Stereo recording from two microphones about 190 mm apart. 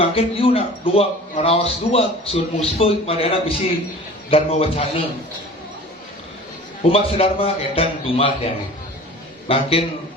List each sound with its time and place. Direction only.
0.0 s a man's voice: 30° left (ahead or behind)
6.9 s a man's voice: 30° left (ahead or behind)
9.5 s a man's voice: 30° left (ahead or behind)